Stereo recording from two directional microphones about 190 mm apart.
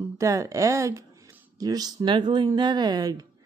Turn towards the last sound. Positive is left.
turn(degrees=-20)  # may be behind; listen again after turning